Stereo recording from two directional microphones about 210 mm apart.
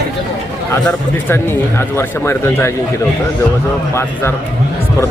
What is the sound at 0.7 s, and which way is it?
A man's voice, 10° left (ahead or behind).